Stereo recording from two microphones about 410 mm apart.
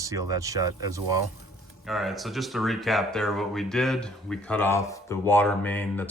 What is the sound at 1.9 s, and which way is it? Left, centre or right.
Speech, centre.